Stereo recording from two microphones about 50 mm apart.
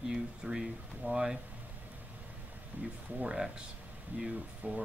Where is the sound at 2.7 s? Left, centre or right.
Right.